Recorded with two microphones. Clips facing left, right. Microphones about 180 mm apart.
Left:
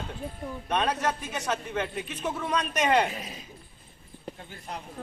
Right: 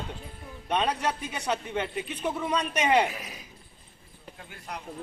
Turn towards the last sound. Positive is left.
turn(degrees=25)  # may be behind; listen again after turning